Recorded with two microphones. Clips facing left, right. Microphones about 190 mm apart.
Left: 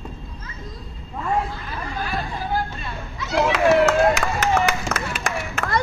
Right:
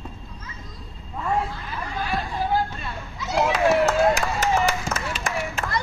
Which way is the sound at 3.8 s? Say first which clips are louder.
Left 2 dB; 70° left (ahead or behind).